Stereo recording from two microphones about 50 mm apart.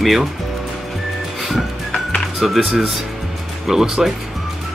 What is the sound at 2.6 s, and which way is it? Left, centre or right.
Speech, centre.